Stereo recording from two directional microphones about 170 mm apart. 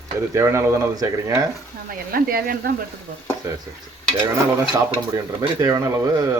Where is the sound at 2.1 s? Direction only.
60° right (ahead or behind).